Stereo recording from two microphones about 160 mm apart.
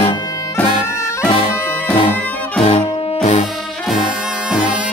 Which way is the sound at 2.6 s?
35° left (ahead or behind).